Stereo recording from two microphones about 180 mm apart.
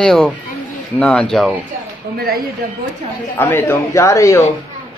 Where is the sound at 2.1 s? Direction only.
60° right (ahead or behind).